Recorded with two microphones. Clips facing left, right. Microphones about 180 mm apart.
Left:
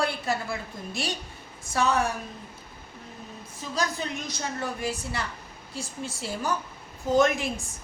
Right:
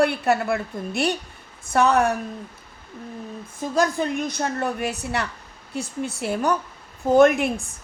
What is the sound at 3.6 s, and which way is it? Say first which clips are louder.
A woman's voice: right 8 dB; 50° right (ahead or behind).